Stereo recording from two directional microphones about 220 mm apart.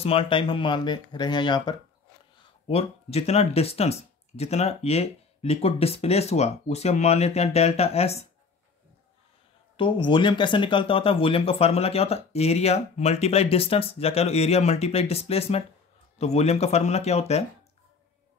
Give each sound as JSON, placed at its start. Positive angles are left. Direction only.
{"t": 0.0, "sound": "speech", "side_deg": 25}
{"t": 9.8, "sound": "speech", "side_deg": 20}